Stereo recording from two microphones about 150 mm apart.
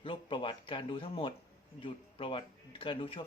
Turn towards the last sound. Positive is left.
turn(degrees=35)  # may be behind; listen again after turning